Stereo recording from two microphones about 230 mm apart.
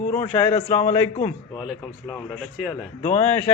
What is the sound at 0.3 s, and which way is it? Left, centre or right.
Speech, centre.